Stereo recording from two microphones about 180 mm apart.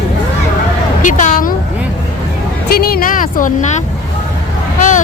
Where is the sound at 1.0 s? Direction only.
45° left (ahead or behind).